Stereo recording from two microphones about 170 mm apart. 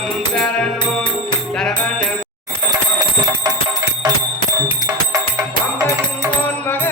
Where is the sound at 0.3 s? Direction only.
5° left (ahead or behind).